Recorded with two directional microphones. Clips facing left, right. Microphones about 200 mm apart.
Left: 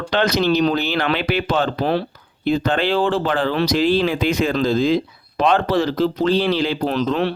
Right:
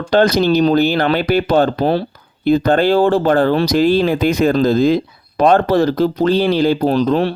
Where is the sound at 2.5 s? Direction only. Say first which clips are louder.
Right 6 dB; 45° right (ahead or behind).